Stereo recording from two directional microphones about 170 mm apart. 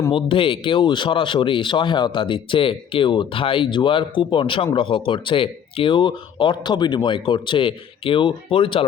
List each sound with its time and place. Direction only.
0.1 s speech: 30° left (ahead or behind)